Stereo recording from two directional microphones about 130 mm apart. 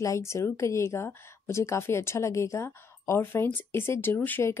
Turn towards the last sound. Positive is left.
turn(degrees=15)  # may be behind; listen again after turning